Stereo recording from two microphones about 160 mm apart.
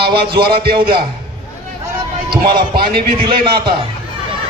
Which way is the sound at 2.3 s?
30° right (ahead or behind).